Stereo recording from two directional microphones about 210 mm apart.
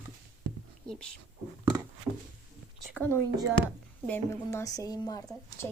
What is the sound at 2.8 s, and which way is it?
Speech, 5° left (ahead or behind).